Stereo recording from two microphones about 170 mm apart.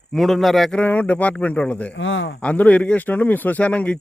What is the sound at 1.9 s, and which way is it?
Speech, 90° left.